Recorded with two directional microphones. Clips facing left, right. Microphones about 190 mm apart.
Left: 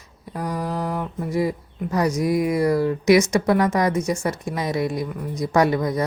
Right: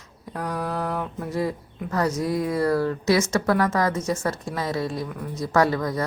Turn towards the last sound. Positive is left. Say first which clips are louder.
# left 2 dB
turn(degrees=15)  # may be behind; listen again after turning